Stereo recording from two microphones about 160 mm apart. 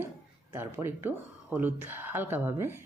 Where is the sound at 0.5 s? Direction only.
15° right (ahead or behind).